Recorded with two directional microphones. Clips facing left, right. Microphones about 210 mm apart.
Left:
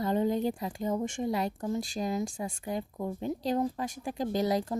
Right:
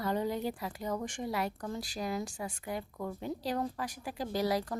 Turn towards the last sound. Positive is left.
turn(degrees=25)  # may be behind; listen again after turning